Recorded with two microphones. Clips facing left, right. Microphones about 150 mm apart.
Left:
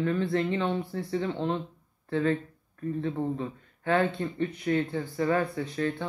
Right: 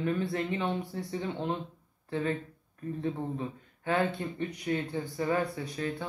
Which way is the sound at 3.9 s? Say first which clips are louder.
Left 3 dB; 15° right (ahead or behind).